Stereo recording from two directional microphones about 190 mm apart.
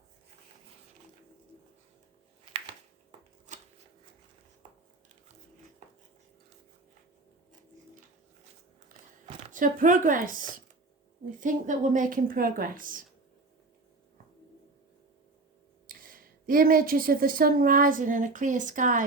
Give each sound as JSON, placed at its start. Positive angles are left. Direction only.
{"t": 3.5, "sound": "shuffling cards", "side_deg": -40}
{"t": 9.5, "sound": "speech", "side_deg": -45}
{"t": 15.9, "sound": "speech", "side_deg": -50}